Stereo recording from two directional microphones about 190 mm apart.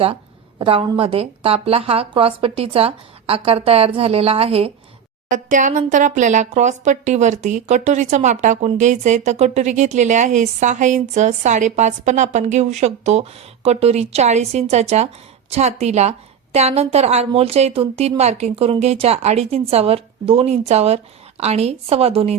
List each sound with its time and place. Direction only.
0.6 s a woman's voice: 30° right (ahead or behind)
5.3 s a woman's voice: 40° right (ahead or behind)